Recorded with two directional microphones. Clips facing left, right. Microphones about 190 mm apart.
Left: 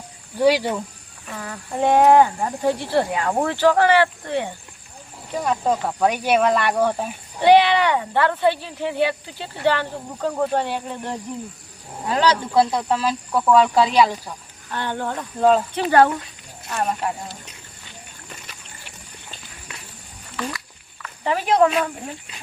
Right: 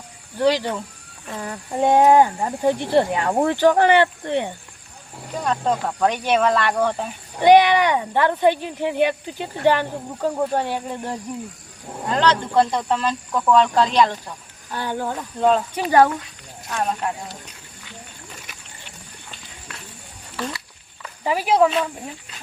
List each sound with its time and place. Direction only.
0.3 s speech: 10° left (ahead or behind)
1.3 s speech: 20° right (ahead or behind)
5.4 s speech: 5° left (ahead or behind)
7.4 s speech: 15° right (ahead or behind)
12.0 s speech: 5° left (ahead or behind)
14.7 s speech: 10° right (ahead or behind)
15.4 s speech: centre (ahead or behind)
15.7 s speech: 15° right (ahead or behind)
16.6 s speech: 5° left (ahead or behind)
21.2 s speech: 5° right (ahead or behind)